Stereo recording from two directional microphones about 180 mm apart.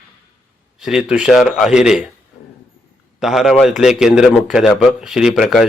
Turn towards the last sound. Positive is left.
turn(degrees=0)  # may be behind; listen again after turning